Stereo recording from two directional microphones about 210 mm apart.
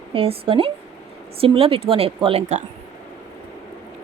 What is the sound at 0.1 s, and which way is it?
A woman's voice, 25° right (ahead or behind).